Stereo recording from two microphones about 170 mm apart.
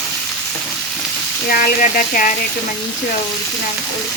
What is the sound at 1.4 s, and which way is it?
Speech, 55° left (ahead or behind).